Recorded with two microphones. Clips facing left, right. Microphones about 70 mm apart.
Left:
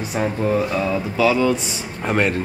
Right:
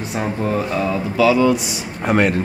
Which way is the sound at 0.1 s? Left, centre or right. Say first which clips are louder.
Left 1 dB; centre.